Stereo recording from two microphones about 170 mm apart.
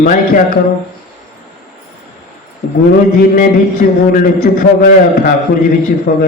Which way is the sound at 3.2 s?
55° left (ahead or behind).